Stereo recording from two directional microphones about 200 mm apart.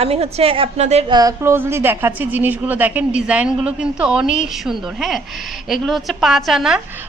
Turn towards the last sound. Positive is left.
turn(degrees=0)  # may be behind; listen again after turning